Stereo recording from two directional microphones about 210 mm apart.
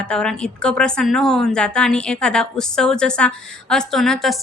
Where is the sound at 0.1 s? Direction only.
5° left (ahead or behind).